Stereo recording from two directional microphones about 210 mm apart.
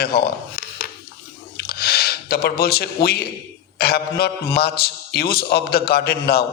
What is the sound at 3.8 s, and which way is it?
A man's voice, 50° left (ahead or behind).